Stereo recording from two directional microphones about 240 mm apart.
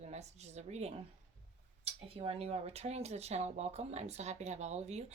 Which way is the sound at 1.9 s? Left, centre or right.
Right.